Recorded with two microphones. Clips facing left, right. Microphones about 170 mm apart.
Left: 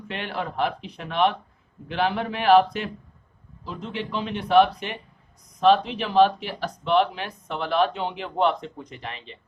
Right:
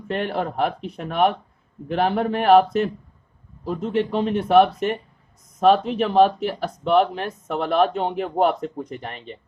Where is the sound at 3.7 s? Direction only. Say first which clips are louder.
Right 8 dB; 45° right (ahead or behind).